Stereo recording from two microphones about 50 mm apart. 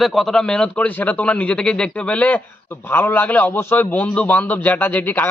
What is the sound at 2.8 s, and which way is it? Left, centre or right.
A man's voice, left.